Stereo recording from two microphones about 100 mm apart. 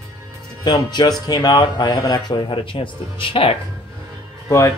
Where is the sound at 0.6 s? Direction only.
45° left (ahead or behind); by 3.6 s 65° left (ahead or behind).